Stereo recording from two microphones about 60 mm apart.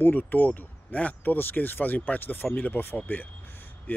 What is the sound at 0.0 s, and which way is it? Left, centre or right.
Speech, left.